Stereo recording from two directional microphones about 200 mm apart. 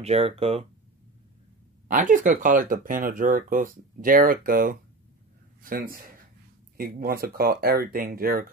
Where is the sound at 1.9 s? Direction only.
40° right (ahead or behind).